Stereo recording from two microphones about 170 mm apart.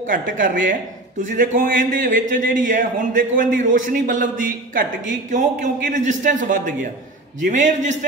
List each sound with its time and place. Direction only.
0.0 s speech: 50° right (ahead or behind)